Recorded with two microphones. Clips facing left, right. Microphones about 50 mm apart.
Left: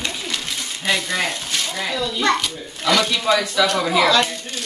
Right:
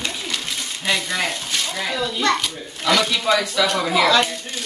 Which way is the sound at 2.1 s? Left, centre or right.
Centre.